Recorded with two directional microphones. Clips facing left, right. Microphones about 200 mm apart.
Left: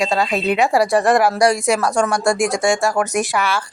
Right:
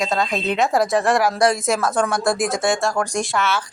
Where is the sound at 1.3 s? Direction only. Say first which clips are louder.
Left 3 dB; centre (ahead or behind).